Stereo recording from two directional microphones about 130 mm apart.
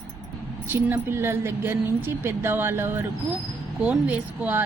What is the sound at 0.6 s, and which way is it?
A woman's voice, 15° right (ahead or behind).